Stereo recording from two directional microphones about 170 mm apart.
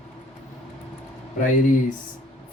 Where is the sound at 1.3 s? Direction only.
50° left (ahead or behind).